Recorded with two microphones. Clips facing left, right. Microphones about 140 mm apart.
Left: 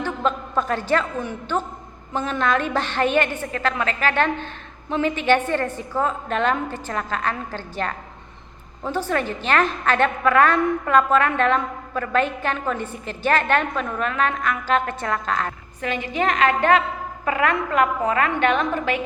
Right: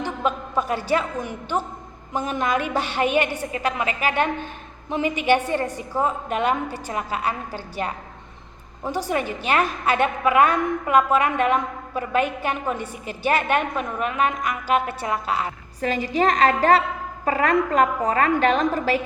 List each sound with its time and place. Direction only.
0.0 s a man's voice: 10° right (ahead or behind)
15.8 s a woman's voice: 35° right (ahead or behind)